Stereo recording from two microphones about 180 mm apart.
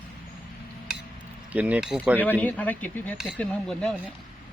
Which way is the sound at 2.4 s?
10° left (ahead or behind).